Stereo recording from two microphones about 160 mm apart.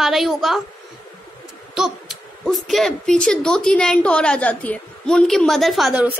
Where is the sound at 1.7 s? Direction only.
Centre (ahead or behind).